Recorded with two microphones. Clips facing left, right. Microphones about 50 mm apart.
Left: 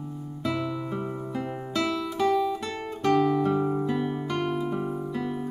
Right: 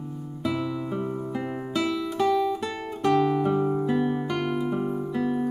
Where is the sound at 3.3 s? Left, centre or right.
Centre.